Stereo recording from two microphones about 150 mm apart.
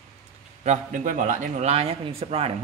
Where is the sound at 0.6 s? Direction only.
55° right (ahead or behind).